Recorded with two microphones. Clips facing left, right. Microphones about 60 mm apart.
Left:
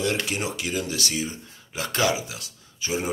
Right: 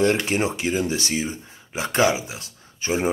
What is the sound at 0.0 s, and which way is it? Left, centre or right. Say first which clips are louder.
Speech: right 6 dB; right.